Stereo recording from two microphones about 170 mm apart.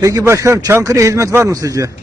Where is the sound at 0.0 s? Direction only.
20° right (ahead or behind).